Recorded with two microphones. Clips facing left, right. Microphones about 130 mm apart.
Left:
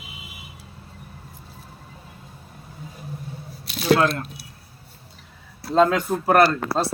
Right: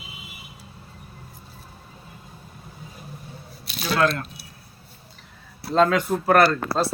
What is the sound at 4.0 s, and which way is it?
Speech, 30° left (ahead or behind).